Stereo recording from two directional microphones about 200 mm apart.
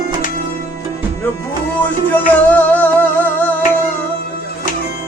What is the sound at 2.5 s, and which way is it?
Music, 5° left (ahead or behind).